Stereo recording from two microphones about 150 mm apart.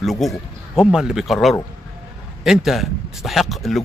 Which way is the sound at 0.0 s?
Centre (ahead or behind).